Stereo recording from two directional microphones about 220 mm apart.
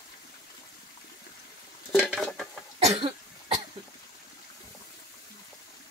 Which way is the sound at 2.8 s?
30° right (ahead or behind).